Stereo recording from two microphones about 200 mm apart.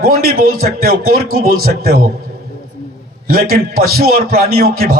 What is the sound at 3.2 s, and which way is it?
A man's voice, 45° right (ahead or behind).